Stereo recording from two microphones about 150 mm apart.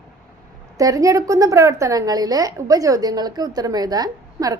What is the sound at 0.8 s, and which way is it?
A woman's voice, 20° right (ahead or behind).